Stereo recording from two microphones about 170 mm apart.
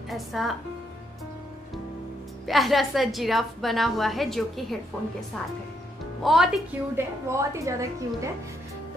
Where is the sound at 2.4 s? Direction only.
Centre (ahead or behind).